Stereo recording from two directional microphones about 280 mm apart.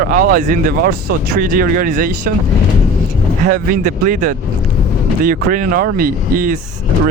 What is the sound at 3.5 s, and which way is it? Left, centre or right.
Speech, right.